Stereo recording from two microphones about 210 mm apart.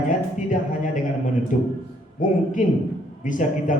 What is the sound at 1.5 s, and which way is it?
Speech, 40° left (ahead or behind).